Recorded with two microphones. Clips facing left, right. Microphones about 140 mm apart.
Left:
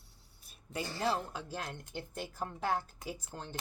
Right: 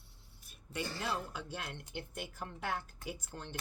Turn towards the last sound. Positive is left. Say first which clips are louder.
# left 1 dB
turn(degrees=40)  # may be behind; listen again after turning